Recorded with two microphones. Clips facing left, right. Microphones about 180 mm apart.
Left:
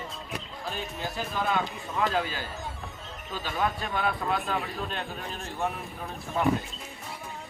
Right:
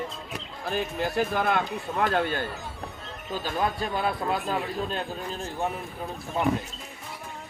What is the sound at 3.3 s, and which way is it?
Speech, 40° right (ahead or behind).